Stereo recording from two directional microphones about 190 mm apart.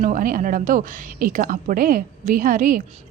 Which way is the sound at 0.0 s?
45° right (ahead or behind).